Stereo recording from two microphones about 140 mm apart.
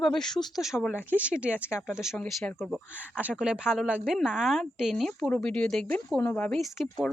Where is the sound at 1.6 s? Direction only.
15° left (ahead or behind).